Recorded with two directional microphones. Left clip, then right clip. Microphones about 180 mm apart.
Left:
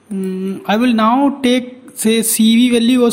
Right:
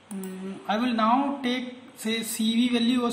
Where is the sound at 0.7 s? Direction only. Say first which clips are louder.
Left 10 dB; 45° left (ahead or behind).